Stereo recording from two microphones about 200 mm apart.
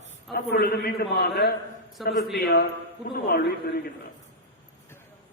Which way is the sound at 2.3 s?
55° left (ahead or behind).